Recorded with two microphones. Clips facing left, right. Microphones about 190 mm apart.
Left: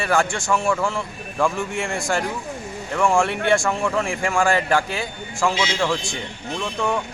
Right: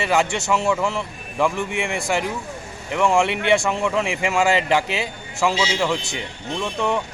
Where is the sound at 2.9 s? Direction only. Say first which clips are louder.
Right 1 dB; 20° right (ahead or behind).